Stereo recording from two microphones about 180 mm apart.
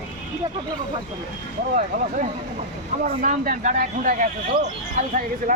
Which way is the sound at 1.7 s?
45° right (ahead or behind).